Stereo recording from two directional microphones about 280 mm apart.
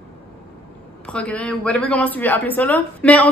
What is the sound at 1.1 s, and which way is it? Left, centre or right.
A woman's voice, centre.